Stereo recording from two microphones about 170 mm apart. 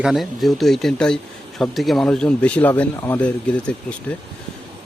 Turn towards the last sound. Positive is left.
turn(degrees=5)  # may be behind; listen again after turning